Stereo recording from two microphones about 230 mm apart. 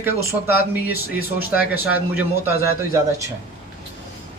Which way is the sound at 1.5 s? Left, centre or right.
Centre.